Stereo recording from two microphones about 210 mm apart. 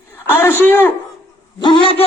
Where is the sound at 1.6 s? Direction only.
20° left (ahead or behind).